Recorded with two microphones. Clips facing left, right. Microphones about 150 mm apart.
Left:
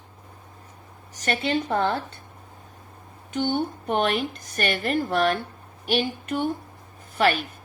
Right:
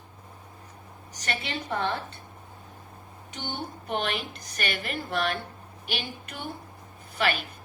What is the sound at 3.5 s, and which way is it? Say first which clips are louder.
A woman's voice: left 4 dB; 45° left (ahead or behind).